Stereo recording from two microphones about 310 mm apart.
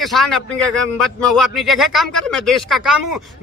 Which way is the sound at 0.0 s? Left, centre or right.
Centre.